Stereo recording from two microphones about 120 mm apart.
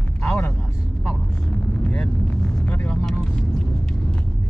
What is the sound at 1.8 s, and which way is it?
Vehicle, 15° left (ahead or behind).